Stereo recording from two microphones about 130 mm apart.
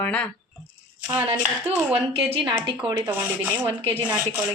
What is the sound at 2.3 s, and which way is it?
Speech, 35° right (ahead or behind).